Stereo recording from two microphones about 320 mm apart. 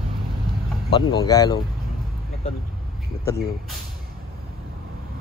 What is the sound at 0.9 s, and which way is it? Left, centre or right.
Speech, centre.